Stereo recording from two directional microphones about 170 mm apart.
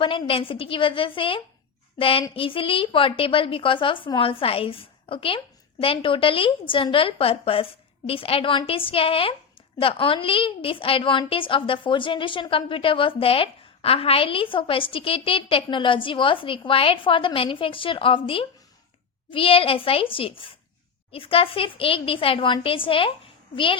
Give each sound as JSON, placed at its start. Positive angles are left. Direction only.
{"t": 0.0, "sound": "a woman's voice", "side_deg": 30}